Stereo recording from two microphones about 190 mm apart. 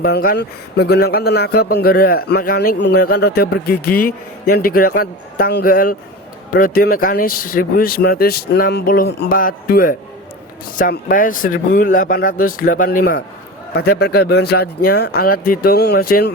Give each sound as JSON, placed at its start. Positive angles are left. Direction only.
{"t": 0.0, "sound": "a man's voice", "side_deg": 50}